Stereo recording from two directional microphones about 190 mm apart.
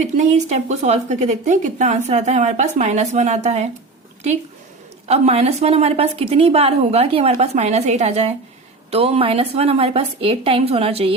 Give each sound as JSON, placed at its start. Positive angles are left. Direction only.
{"t": 0.0, "sound": "speech", "side_deg": -35}
{"t": 5.0, "sound": "speech", "side_deg": -35}